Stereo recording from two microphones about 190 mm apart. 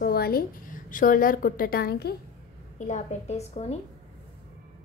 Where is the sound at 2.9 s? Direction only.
35° left (ahead or behind).